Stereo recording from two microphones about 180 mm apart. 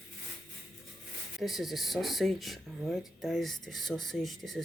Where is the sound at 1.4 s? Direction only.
Centre (ahead or behind).